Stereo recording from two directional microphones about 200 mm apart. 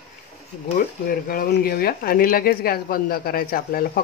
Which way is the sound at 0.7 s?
45° left (ahead or behind).